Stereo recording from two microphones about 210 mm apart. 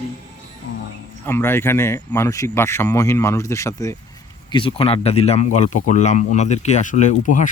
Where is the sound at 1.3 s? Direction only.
10° left (ahead or behind).